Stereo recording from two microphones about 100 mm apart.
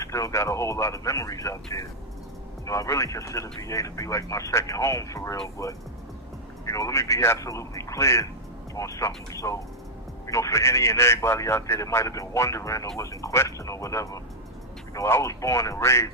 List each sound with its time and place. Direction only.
0.0 s speech: 35° left (ahead or behind)